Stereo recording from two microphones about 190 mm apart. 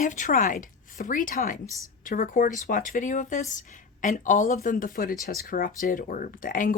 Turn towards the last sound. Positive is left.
turn(degrees=45)  # may be behind; listen again after turning